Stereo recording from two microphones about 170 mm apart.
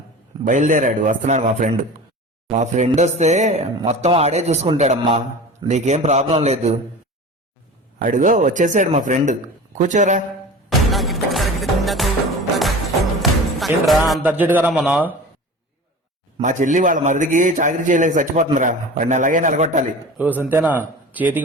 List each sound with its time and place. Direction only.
0.4 s a man's voice: 50° right (ahead or behind)
5.7 s a man's voice: 45° right (ahead or behind)
7.9 s a man's voice: 55° right (ahead or behind)
10.7 s music: centre (ahead or behind)
14.1 s a man's voice: 10° right (ahead or behind)
16.4 s a man's voice: 45° right (ahead or behind)
20.1 s speech: 10° right (ahead or behind)